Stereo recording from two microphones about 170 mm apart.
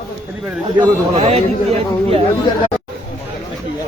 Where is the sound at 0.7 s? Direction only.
30° right (ahead or behind).